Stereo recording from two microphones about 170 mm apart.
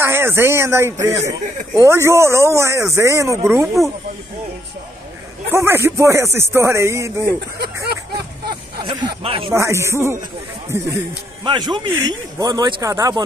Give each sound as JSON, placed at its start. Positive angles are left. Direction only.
{"t": 0.0, "sound": "speech", "side_deg": -15}
{"t": 5.5, "sound": "speech", "side_deg": -15}
{"t": 7.8, "sound": "a sound", "side_deg": -70}
{"t": 8.8, "sound": "speech", "side_deg": -30}
{"t": 9.5, "sound": "speech", "side_deg": -15}
{"t": 11.4, "sound": "speech", "side_deg": -25}